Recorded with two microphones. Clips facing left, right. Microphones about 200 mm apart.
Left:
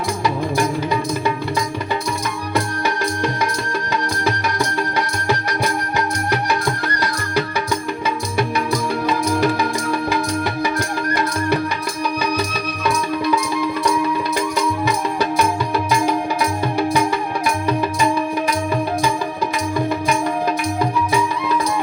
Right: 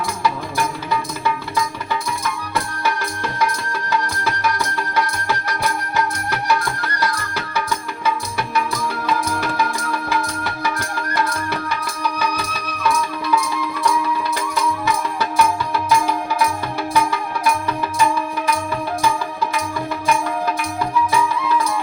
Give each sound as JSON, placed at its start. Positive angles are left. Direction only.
{"t": 0.2, "sound": "music", "side_deg": 15}
{"t": 4.2, "sound": "music", "side_deg": 15}
{"t": 8.0, "sound": "music", "side_deg": 15}
{"t": 12.2, "sound": "music", "side_deg": 15}